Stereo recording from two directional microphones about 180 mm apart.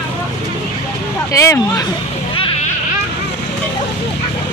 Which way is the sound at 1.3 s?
15° left (ahead or behind).